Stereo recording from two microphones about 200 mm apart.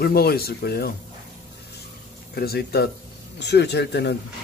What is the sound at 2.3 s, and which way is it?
A man's voice, 50° left (ahead or behind).